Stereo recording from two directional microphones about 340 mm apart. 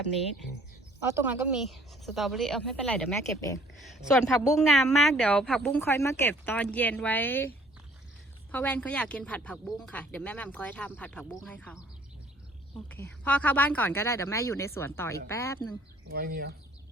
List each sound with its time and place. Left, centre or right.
1.0 s speech: centre
8.5 s speech: centre
12.9 s speech: centre
16.0 s speech: right